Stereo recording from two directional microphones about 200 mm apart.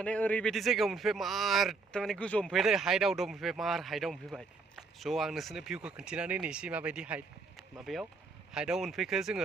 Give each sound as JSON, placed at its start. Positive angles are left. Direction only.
{"t": 0.0, "sound": "speech", "side_deg": 5}